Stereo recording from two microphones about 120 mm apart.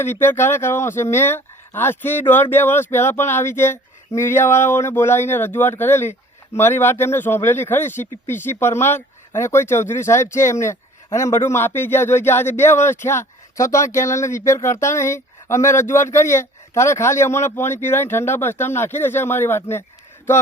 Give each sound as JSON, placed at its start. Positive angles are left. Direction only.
{"t": 0.0, "sound": "speech", "side_deg": 20}